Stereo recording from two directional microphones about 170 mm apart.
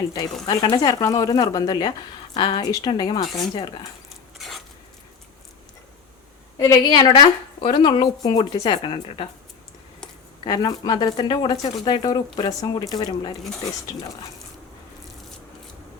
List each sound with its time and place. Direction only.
0.4 s speech: 25° left (ahead or behind)
4.4 s a sound: centre (ahead or behind)
6.6 s speech: 20° left (ahead or behind)
10.4 s speech: 25° left (ahead or behind)